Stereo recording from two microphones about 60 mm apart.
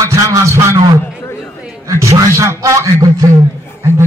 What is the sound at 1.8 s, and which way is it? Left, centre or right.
A man's voice, right.